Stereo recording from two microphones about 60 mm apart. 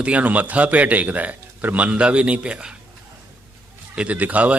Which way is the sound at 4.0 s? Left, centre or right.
Right.